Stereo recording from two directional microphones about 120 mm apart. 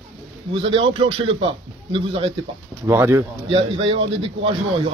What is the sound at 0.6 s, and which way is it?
A man's voice, 45° right (ahead or behind).